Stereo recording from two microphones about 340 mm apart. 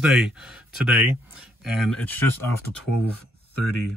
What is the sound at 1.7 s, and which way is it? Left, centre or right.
Speech, centre.